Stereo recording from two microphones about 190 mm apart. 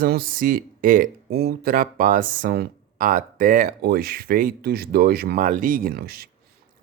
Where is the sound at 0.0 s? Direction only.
50° right (ahead or behind).